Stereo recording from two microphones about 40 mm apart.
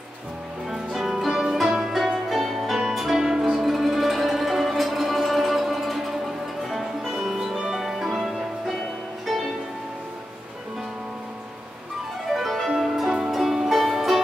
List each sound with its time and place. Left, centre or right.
0.7 s music: centre
3.0 s music: centre
12.3 s music: centre